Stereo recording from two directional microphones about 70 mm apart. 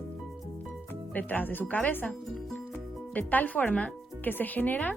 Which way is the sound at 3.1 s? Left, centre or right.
Left.